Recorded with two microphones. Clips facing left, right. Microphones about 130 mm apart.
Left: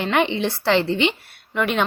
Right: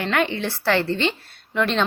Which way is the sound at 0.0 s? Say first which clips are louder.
Left 2 dB; 20° left (ahead or behind).